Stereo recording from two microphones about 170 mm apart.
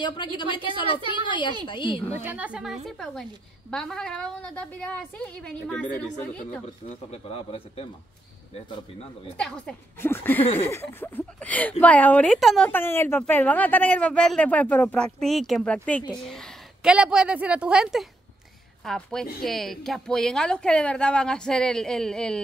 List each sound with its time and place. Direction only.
0.0 s a woman's voice: 25° left (ahead or behind)
2.2 s a woman's voice: 10° right (ahead or behind); by 6.0 s 5° left (ahead or behind)
7.1 s speech: 35° left (ahead or behind)
9.4 s a woman's voice: 5° left (ahead or behind)
10.4 s speech: 40° left (ahead or behind)
10.7 s a woman's voice: 15° left (ahead or behind)